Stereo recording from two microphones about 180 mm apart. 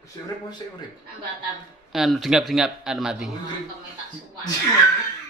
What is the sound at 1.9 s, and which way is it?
A man's voice, centre (ahead or behind).